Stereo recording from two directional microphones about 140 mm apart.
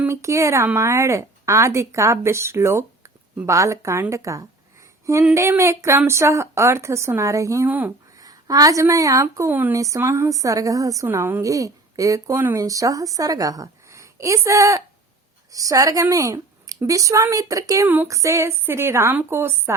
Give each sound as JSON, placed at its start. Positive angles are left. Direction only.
{"t": 0.0, "sound": "a woman's voice", "side_deg": -20}
{"t": 8.2, "sound": "a woman's voice", "side_deg": -25}